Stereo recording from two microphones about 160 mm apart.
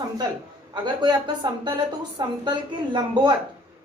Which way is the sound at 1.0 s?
25° right (ahead or behind).